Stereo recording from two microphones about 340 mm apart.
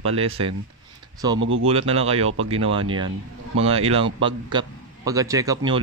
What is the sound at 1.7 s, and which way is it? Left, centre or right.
A man's voice, centre.